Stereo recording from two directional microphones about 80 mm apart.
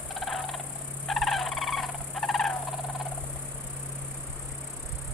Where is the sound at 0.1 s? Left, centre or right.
Centre.